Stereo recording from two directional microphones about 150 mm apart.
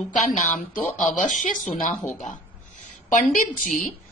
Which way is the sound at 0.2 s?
50° left (ahead or behind).